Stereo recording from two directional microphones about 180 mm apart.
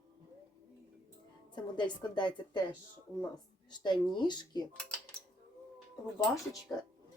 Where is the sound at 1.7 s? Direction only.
25° left (ahead or behind).